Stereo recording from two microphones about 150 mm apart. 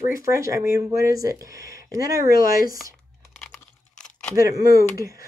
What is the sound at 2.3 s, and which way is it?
Speech, 70° left (ahead or behind).